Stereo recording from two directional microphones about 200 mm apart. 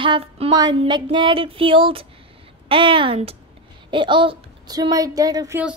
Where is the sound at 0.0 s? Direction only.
25° right (ahead or behind).